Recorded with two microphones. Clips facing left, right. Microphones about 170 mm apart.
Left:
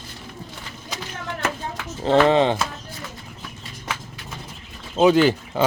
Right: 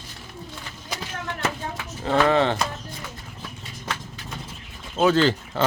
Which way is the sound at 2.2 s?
20° left (ahead or behind).